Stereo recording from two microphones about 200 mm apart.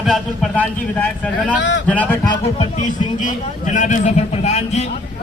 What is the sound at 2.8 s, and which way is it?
A man's voice, 40° left (ahead or behind).